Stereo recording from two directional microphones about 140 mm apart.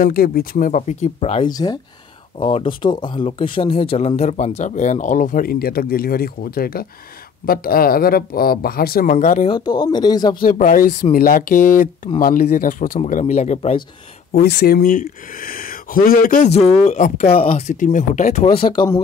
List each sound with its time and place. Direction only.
0.0 s speech: 90° left; by 1.4 s 50° left (ahead or behind)
1.4 s speech: 30° left (ahead or behind)
2.3 s speech: 40° left (ahead or behind); by 9.5 s 65° left (ahead or behind)
9.5 s speech: 30° left (ahead or behind)
10.4 s speech: 70° left (ahead or behind)
12.2 s speech: 90° left
13.0 s speech: 55° left (ahead or behind)
14.3 s speech: 90° left
16.4 s speech: 50° left (ahead or behind)
17.3 s speech: 45° left (ahead or behind)
18.6 s speech: 35° left (ahead or behind)